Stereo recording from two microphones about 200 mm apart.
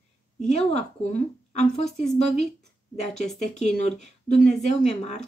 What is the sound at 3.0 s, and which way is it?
Speech, 35° left (ahead or behind).